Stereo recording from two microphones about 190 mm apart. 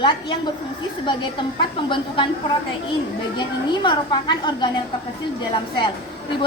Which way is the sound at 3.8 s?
25° left (ahead or behind).